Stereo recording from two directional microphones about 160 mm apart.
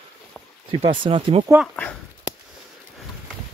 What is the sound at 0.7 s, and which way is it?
Speech, 35° right (ahead or behind).